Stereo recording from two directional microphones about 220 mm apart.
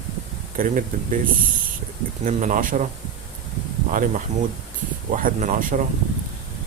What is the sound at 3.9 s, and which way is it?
Speech, 35° right (ahead or behind).